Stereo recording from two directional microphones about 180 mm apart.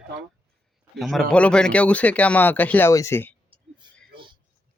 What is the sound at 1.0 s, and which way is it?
Speech, centre (ahead or behind).